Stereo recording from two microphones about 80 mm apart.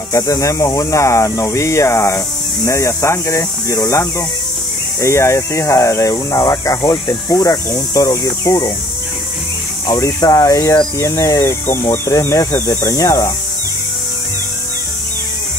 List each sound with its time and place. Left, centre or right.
0.1 s speech: left
5.0 s speech: left
9.9 s speech: left